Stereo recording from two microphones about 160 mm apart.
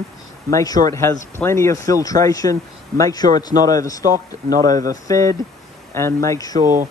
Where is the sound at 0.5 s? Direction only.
20° left (ahead or behind).